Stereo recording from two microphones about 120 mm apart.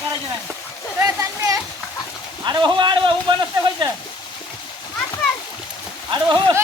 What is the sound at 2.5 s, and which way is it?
Speech, 40° right (ahead or behind).